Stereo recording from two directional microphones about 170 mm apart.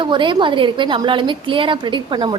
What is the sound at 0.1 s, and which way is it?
A woman's voice, 30° right (ahead or behind).